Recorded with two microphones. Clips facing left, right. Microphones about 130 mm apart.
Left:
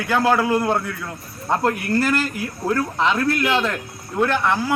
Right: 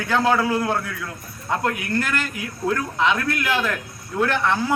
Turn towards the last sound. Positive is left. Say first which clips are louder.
# left 1 dB
turn(degrees=10)  # may be behind; listen again after turning